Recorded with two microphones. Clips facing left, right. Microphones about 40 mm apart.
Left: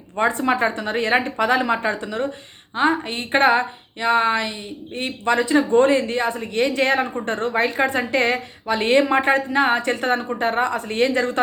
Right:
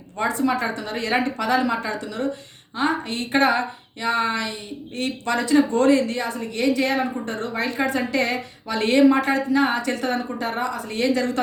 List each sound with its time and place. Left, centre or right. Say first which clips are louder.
0.2 s a woman's voice: left 3 dB; left